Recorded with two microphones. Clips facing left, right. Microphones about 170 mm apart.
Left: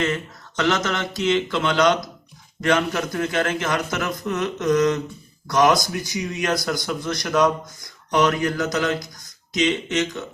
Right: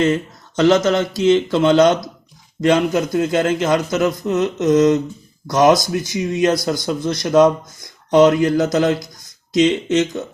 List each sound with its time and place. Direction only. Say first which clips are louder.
0.0 s a man's voice: right 7 dB; 35° right (ahead or behind)